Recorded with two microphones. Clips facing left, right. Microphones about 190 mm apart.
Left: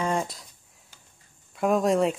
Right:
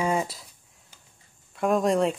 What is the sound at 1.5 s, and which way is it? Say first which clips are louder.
Speech: even; centre (ahead or behind).